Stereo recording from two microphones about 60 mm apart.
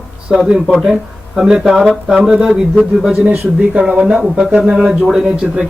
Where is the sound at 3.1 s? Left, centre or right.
Right.